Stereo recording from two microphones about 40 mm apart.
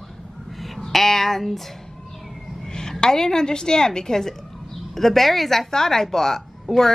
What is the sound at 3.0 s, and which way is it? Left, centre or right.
A woman's voice, centre.